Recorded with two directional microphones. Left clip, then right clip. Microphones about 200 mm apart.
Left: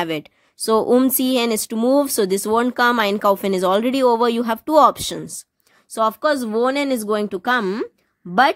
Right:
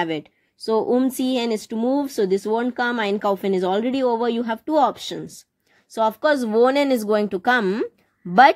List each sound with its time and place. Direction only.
0.0 s speech: 25° left (ahead or behind)
0.7 s speech: 35° left (ahead or behind); by 7.9 s 5° left (ahead or behind)